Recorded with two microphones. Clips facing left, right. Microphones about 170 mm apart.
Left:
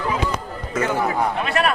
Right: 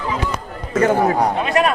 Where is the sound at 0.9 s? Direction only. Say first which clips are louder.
Right 5 dB; 40° right (ahead or behind).